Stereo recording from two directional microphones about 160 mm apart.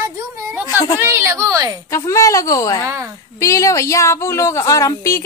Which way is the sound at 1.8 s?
20° left (ahead or behind).